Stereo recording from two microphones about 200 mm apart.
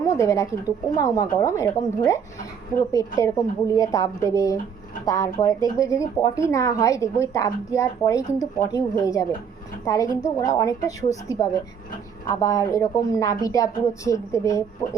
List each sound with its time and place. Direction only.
0.0 s a woman's voice: 15° left (ahead or behind)